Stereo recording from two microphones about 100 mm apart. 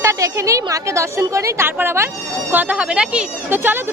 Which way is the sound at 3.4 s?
20° right (ahead or behind).